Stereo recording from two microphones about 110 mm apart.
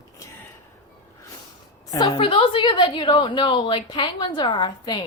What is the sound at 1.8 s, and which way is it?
A woman's voice, 40° left (ahead or behind).